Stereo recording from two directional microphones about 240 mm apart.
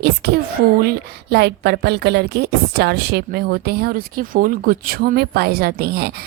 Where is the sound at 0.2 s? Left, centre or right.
Right.